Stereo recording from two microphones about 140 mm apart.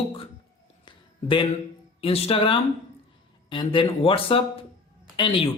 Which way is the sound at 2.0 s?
45° left (ahead or behind).